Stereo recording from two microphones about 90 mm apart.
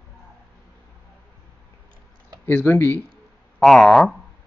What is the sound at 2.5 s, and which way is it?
Speech, 25° left (ahead or behind).